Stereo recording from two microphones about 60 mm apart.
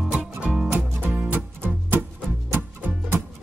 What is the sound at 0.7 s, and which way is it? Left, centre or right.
Music, right.